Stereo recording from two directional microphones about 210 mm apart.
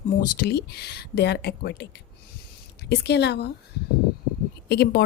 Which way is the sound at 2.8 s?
55° left (ahead or behind).